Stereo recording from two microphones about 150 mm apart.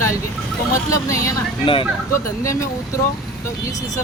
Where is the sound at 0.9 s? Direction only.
20° left (ahead or behind).